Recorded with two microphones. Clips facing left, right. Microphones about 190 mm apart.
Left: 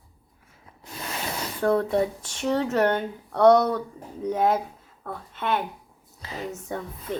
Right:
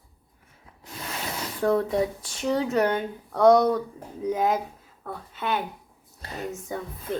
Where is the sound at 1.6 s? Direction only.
15° right (ahead or behind).